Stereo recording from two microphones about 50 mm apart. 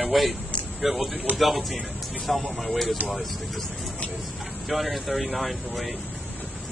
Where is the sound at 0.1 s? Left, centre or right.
Centre.